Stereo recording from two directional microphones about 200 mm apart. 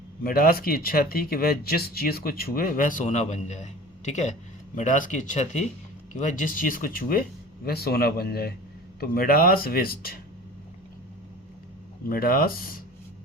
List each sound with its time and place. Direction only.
0.2 s speech: 45° left (ahead or behind)
12.0 s speech: 45° left (ahead or behind)